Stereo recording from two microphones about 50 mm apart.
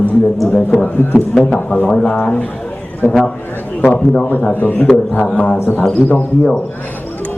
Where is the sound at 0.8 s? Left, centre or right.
Left.